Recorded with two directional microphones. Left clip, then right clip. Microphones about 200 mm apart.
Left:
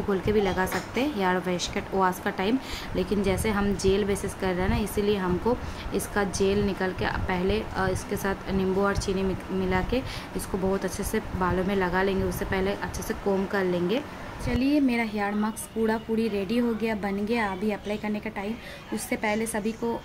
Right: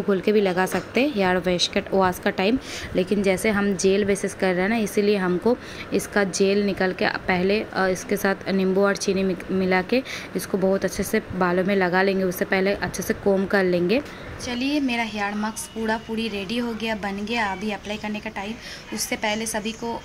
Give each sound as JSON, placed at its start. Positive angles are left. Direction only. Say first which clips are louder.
{"t": 0.1, "sound": "speech", "louder": "right 5 dB", "side_deg": -25}
{"t": 14.5, "sound": "a woman's voice", "louder": "even", "side_deg": 0}